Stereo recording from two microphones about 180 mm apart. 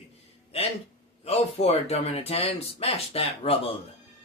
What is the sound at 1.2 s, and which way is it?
Speech, 35° left (ahead or behind).